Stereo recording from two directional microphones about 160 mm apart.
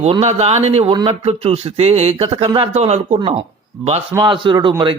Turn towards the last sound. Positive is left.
turn(degrees=-30)  # may be behind; listen again after turning